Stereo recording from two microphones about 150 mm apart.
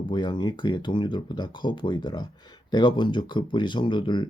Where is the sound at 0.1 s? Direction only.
30° left (ahead or behind).